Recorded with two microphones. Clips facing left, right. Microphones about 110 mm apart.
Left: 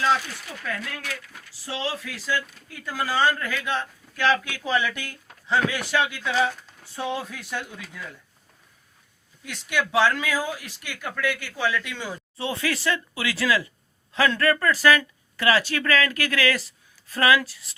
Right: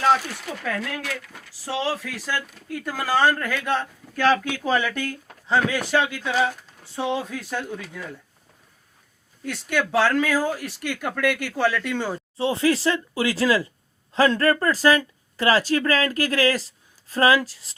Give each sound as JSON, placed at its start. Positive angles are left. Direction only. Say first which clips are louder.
{"t": 0.0, "sound": "speech", "louder": "right 3 dB", "side_deg": -65}
{"t": 1.3, "sound": "speech", "louder": "right 5 dB", "side_deg": -65}
{"t": 9.4, "sound": "speech", "louder": "right 3 dB", "side_deg": -45}
{"t": 11.0, "sound": "speech", "louder": "right 4 dB", "side_deg": -65}
{"t": 12.4, "sound": "speech", "louder": "right 7 dB", "side_deg": -30}